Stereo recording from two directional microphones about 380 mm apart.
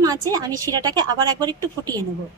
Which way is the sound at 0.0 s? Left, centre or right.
Centre.